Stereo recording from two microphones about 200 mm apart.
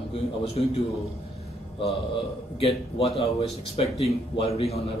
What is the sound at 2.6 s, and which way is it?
A man's voice, 30° left (ahead or behind).